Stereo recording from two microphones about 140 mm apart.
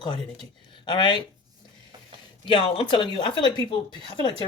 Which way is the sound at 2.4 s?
40° left (ahead or behind).